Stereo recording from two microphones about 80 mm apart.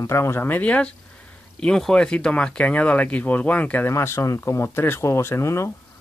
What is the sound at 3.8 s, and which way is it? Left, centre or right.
Speech, left.